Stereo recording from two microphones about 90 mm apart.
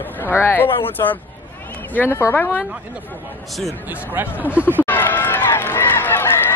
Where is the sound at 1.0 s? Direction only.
40° left (ahead or behind); by 2.6 s 20° left (ahead or behind).